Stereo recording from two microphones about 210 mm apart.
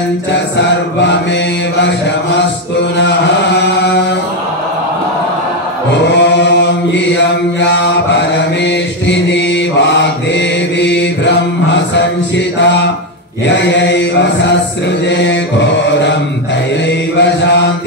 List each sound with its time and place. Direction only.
3.0 s chant: 55° left (ahead or behind)
6.1 s mantra: 55° left (ahead or behind)
13.5 s chant: 55° left (ahead or behind)
15.0 s mantra: 55° left (ahead or behind)
17.2 s mantra: 55° left (ahead or behind)